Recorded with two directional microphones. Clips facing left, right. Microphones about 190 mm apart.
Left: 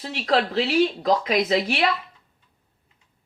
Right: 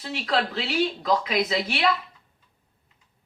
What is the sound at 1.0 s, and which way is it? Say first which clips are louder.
Speech: left 3 dB; 45° left (ahead or behind).